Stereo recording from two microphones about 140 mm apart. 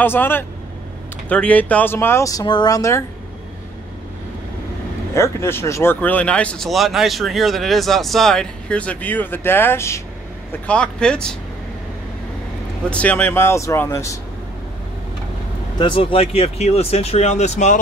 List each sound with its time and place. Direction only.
0.0 s speech: 15° left (ahead or behind)
5.1 s speech: 20° left (ahead or behind)
10.7 s speech: 5° left (ahead or behind)
12.9 s speech: 10° left (ahead or behind)
15.8 s speech: 40° left (ahead or behind); by 17.7 s 55° left (ahead or behind)